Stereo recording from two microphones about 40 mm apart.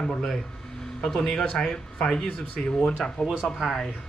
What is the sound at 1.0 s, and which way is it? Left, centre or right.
Speech, centre.